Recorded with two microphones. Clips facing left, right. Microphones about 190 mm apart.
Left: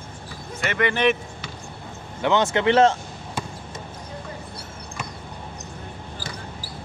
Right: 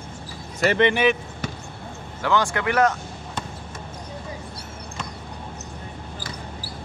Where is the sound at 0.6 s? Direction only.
25° right (ahead or behind).